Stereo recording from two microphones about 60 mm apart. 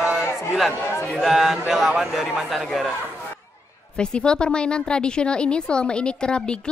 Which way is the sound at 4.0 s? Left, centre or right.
Centre.